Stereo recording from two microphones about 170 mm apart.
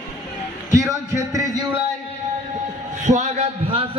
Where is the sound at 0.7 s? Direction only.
20° right (ahead or behind).